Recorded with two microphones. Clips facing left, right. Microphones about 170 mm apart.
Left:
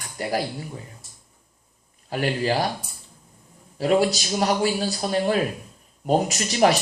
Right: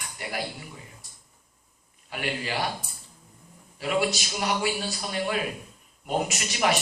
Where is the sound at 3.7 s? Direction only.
40° left (ahead or behind).